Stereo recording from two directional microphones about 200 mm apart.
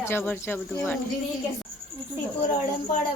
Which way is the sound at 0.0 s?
10° left (ahead or behind).